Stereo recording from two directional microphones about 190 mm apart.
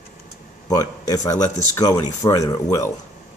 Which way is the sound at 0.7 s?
20° left (ahead or behind).